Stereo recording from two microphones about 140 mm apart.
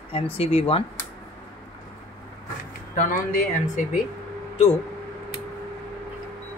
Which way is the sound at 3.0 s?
70° left (ahead or behind).